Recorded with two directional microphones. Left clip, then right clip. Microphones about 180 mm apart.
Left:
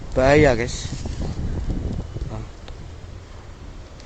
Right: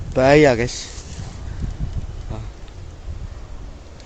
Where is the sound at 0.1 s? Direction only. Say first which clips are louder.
Right 3 dB; 30° right (ahead or behind).